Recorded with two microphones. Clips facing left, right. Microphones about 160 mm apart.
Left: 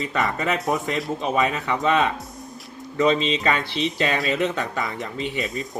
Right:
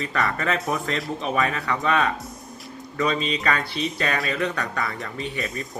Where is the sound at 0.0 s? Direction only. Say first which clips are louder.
Left 1 dB; 20° left (ahead or behind).